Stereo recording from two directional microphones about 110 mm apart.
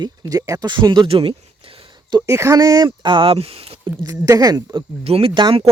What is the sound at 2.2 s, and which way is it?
Speech, 30° right (ahead or behind).